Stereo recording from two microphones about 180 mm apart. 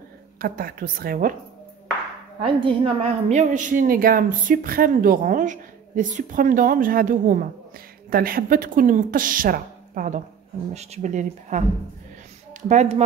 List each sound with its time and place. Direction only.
0.4 s a woman's voice: 50° right (ahead or behind)
2.4 s a woman's voice: 30° right (ahead or behind); by 10.2 s 50° right (ahead or behind)
10.7 s a woman's voice: 40° right (ahead or behind)
12.6 s speech: 40° right (ahead or behind)